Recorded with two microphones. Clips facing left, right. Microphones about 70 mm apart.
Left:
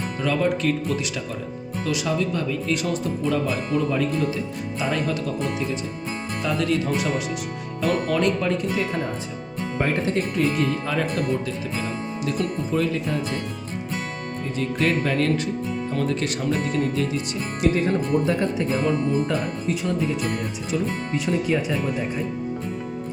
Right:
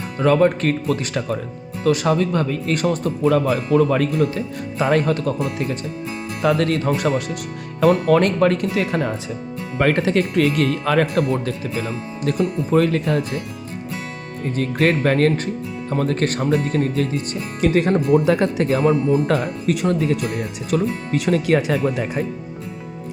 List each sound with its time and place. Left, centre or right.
0.2 s speech: right
12.7 s speech: right
14.5 s speech: right
18.3 s speech: right
19.3 s speech: right